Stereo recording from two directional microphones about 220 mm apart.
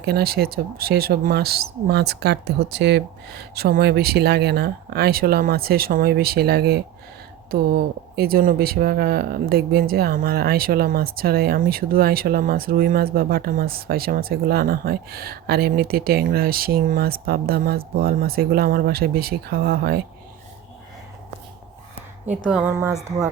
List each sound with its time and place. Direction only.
0.0 s speech: 45° right (ahead or behind)
22.4 s speech: 5° right (ahead or behind)